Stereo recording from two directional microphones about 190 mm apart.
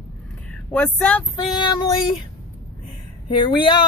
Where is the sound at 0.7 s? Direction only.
5° left (ahead or behind).